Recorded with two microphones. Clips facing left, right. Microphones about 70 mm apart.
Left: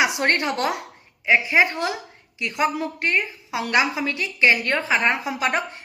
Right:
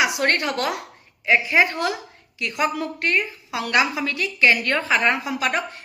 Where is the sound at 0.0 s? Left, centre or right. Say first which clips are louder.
Even; left.